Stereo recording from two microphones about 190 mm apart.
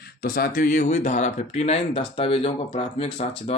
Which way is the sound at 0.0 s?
50° left (ahead or behind).